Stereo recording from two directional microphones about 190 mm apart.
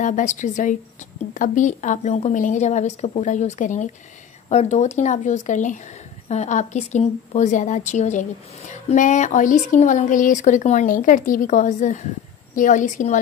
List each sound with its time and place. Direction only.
0.0 s a woman's voice: 40° left (ahead or behind)